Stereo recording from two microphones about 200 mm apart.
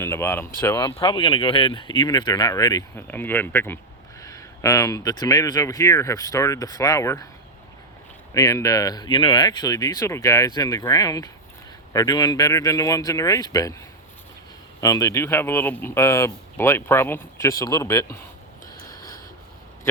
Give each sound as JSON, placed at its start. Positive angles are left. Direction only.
{"t": 0.0, "sound": "speech", "side_deg": 10}
{"t": 8.3, "sound": "speech", "side_deg": 15}
{"t": 14.8, "sound": "speech", "side_deg": 15}